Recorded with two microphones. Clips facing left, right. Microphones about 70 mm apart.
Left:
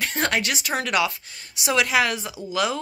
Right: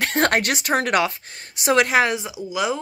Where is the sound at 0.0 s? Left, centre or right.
Right.